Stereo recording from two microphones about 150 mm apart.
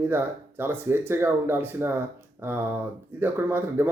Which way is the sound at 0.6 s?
15° right (ahead or behind).